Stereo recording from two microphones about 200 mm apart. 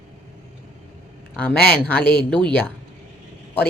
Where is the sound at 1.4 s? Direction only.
10° left (ahead or behind).